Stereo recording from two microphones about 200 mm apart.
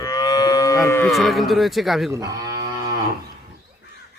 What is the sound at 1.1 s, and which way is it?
Speech, centre (ahead or behind).